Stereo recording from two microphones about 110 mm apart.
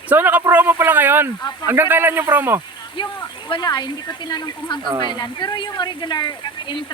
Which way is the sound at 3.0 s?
50° left (ahead or behind).